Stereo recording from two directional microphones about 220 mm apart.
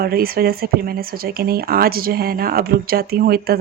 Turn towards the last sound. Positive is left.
turn(degrees=-45)  # may be behind; listen again after turning